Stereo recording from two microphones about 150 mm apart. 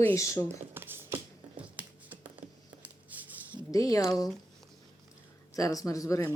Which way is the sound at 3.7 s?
25° left (ahead or behind).